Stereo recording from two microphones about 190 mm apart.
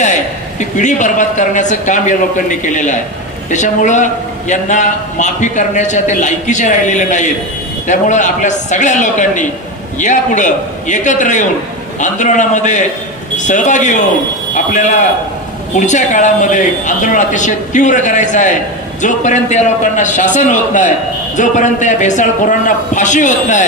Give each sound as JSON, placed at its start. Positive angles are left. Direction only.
{"t": 0.8, "sound": "a man's voice", "side_deg": 40}